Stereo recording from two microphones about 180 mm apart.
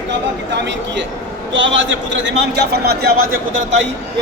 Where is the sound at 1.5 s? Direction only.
90° right; by 3.4 s 55° right (ahead or behind).